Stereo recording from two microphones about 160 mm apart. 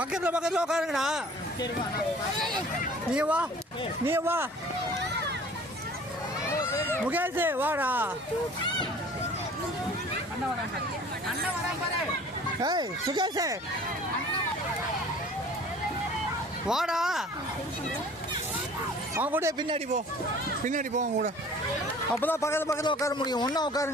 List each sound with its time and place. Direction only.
0.0 s a man's voice: 10° right (ahead or behind)
3.2 s speech: 10° right (ahead or behind)
7.1 s speech: 10° right (ahead or behind)
12.6 s speech: 25° right (ahead or behind)
16.6 s a man's voice: 5° right (ahead or behind)
19.1 s speech: 15° right (ahead or behind)
19.5 s speech: 30° right (ahead or behind)
20.7 s speech: 50° right (ahead or behind)
22.1 s a man's voice: 10° left (ahead or behind)